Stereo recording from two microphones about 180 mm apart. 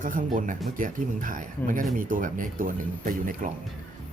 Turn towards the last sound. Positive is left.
turn(degrees=-50)  # may be behind; listen again after turning